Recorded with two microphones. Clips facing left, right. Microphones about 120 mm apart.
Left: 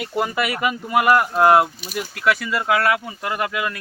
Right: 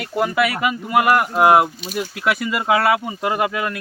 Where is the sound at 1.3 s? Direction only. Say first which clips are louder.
Right 1 dB; 15° right (ahead or behind).